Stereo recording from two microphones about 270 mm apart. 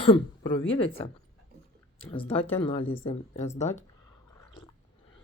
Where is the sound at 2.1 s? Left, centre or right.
Left.